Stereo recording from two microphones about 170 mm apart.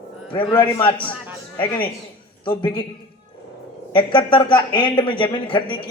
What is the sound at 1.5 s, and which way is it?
A man's voice, 30° left (ahead or behind).